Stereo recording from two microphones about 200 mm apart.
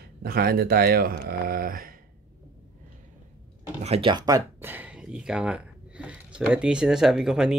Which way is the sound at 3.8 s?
30° right (ahead or behind).